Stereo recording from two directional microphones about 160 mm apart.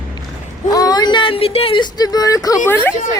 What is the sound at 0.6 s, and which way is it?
Speech, 25° left (ahead or behind).